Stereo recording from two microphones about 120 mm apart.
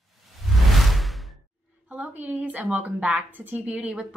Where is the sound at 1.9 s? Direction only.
15° right (ahead or behind).